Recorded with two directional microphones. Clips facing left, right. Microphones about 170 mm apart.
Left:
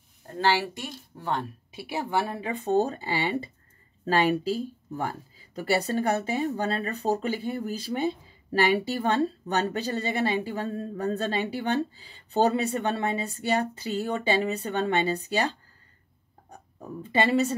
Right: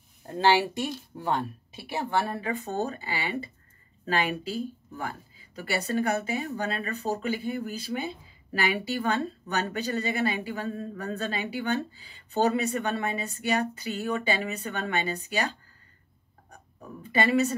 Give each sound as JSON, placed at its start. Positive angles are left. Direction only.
{"t": 0.4, "sound": "speech", "side_deg": -20}
{"t": 1.8, "sound": "speech", "side_deg": 10}
{"t": 17.1, "sound": "speech", "side_deg": 30}